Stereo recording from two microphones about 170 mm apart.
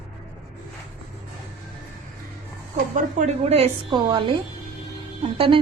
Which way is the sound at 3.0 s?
40° right (ahead or behind).